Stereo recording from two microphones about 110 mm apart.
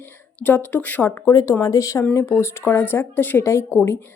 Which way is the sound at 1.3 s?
35° left (ahead or behind).